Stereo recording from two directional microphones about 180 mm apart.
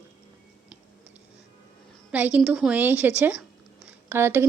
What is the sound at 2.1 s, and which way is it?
A woman's voice, 5° right (ahead or behind).